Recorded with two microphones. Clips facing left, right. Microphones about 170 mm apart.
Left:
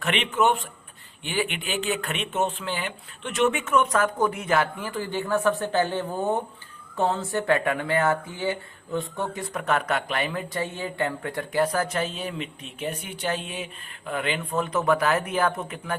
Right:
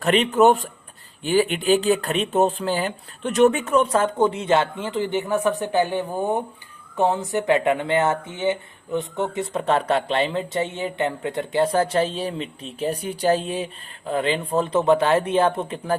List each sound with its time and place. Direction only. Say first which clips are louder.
0.0 s speech: right 7 dB; 35° right (ahead or behind)